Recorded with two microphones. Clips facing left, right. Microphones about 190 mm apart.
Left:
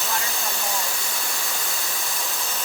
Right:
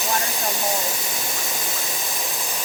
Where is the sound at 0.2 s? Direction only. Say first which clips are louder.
Right 4 dB; 20° right (ahead or behind).